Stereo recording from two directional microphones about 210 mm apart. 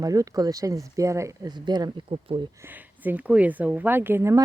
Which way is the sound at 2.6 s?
10° right (ahead or behind).